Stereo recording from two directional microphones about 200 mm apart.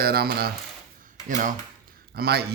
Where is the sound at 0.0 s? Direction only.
50° right (ahead or behind).